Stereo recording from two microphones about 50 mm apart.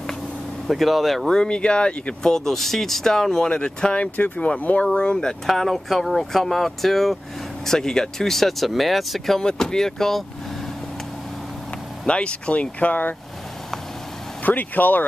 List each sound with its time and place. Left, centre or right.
0.7 s speech: centre
2.3 s speech: centre; by 4.8 s left
4.9 s speech: centre
5.5 s speech: centre
9.4 s speech: centre
12.1 s speech: left
14.4 s speech: left